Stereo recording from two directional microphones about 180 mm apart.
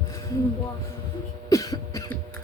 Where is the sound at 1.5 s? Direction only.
20° left (ahead or behind).